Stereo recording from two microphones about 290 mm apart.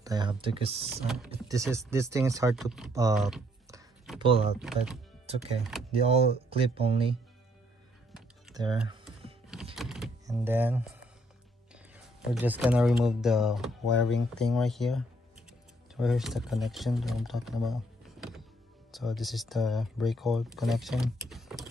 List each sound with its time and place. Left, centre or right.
0.0 s speech: centre
1.0 s speech: centre
2.9 s speech: centre
3.2 s speech: centre
4.6 s speech: centre
5.9 s speech: right
8.5 s speech: centre
9.8 s power windows: centre
10.2 s speech: centre